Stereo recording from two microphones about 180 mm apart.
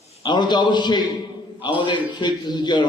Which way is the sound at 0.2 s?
25° left (ahead or behind).